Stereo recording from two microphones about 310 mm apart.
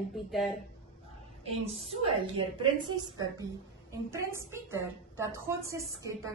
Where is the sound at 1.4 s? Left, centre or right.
Centre.